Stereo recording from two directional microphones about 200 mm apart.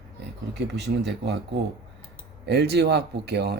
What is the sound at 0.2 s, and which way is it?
Speech, 55° right (ahead or behind).